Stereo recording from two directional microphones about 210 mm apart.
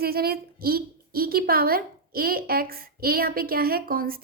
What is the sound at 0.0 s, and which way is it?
A woman's voice, 45° right (ahead or behind).